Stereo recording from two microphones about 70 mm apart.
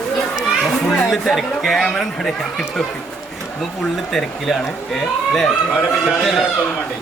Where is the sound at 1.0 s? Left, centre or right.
Centre.